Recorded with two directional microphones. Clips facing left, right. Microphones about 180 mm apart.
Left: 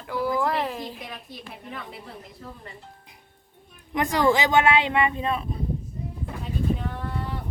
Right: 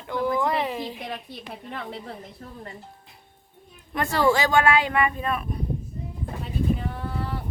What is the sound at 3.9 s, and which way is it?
Speech, 15° left (ahead or behind).